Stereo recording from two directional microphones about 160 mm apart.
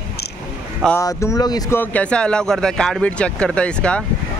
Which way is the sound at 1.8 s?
10° left (ahead or behind).